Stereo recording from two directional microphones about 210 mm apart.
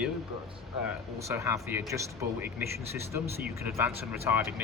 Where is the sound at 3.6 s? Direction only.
10° right (ahead or behind).